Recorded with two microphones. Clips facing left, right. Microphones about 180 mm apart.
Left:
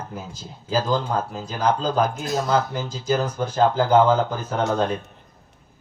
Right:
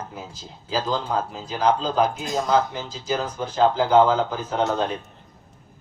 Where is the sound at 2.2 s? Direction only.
15° right (ahead or behind).